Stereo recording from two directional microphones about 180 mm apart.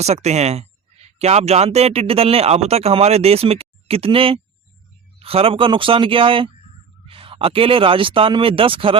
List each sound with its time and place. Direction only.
0.0 s speech: 35° right (ahead or behind)